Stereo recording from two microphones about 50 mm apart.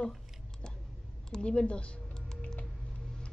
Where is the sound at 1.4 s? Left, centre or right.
Left.